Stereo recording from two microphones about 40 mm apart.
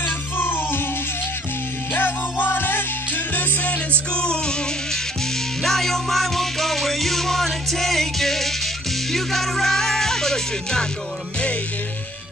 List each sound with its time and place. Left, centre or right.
0.0 s music: left
2.0 s music: left
4.1 s music: left
5.6 s music: centre